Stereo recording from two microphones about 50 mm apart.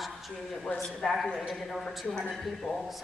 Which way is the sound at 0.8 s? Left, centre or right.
Centre.